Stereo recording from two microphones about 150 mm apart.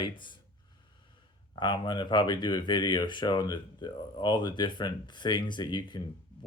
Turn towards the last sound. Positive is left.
turn(degrees=30)  # may be behind; listen again after turning